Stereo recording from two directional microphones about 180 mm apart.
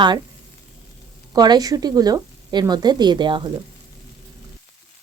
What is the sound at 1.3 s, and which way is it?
A woman's voice, 20° right (ahead or behind).